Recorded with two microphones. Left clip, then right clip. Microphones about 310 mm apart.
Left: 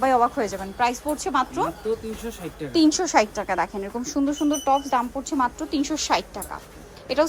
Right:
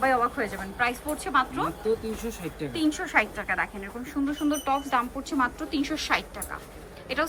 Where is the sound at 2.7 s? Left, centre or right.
Centre.